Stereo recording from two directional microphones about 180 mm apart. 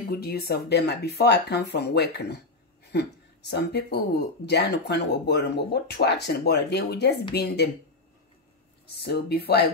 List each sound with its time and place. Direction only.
0.1 s speech: 60° left (ahead or behind)
9.0 s speech: 60° left (ahead or behind)